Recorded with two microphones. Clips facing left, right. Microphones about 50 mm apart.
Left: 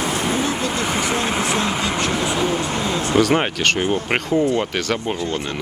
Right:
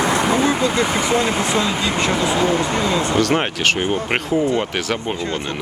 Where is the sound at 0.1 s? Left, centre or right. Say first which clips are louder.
Right 4 dB; right.